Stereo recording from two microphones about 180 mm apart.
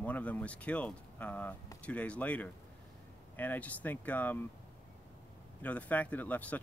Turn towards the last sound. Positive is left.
turn(degrees=10)  # may be behind; listen again after turning